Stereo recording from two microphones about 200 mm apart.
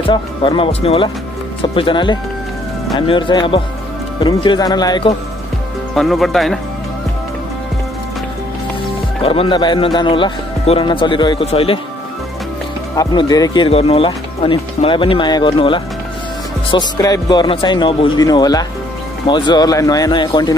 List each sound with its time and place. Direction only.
0.0 s speech: 25° left (ahead or behind)
5.9 s speech: centre (ahead or behind)
9.2 s speech: 30° left (ahead or behind)
12.9 s speech: 20° left (ahead or behind)